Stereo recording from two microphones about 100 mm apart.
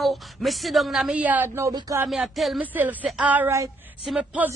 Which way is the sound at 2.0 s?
Centre (ahead or behind).